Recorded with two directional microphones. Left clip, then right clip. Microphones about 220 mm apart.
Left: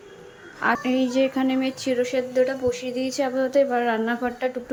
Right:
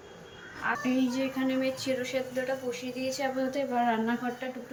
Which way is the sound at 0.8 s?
10° left (ahead or behind).